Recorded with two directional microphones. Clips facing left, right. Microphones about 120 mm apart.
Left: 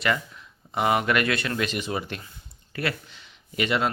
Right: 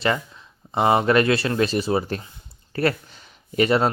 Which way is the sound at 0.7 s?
30° right (ahead or behind).